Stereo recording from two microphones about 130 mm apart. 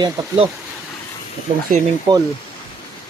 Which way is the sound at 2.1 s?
35° right (ahead or behind).